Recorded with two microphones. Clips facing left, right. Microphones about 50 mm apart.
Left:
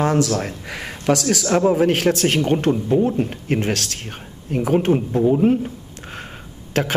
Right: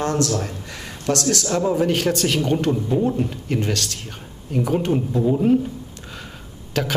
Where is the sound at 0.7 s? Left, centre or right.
Left.